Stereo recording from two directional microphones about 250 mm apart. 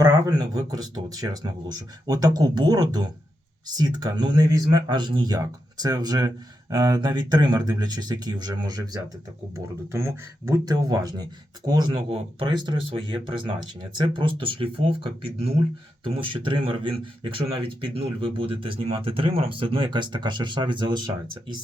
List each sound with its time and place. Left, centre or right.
0.0 s speech: centre
16.1 s speech: centre